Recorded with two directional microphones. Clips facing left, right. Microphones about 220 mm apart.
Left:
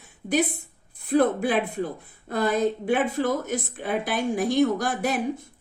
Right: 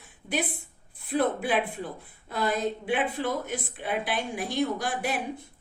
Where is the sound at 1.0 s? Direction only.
45° left (ahead or behind).